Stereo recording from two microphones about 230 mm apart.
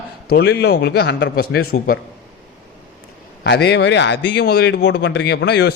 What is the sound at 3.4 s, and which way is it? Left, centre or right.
Speech, left.